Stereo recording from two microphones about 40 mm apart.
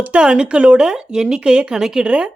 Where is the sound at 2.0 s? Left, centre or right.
Right.